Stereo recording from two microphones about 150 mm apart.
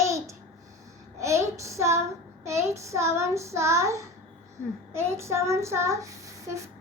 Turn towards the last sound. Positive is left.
turn(degrees=-20)  # may be behind; listen again after turning